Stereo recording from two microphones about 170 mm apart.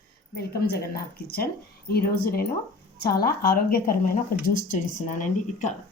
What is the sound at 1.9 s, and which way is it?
A woman's voice, 65° left (ahead or behind).